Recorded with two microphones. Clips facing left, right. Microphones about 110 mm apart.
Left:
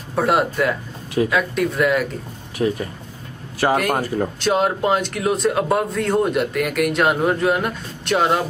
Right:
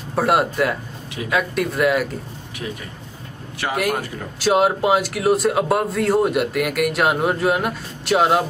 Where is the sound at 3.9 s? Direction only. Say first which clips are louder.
Left 5 dB; 35° left (ahead or behind).